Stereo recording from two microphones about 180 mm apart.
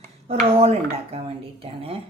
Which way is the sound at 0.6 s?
35° right (ahead or behind).